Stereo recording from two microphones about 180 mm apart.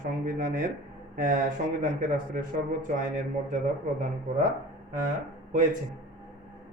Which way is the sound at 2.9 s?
45° right (ahead or behind).